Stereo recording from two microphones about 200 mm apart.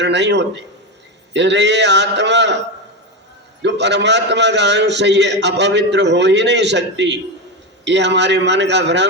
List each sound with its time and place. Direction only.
0.0 s a man's voice: 60° right (ahead or behind)
3.6 s a man's voice: 60° right (ahead or behind)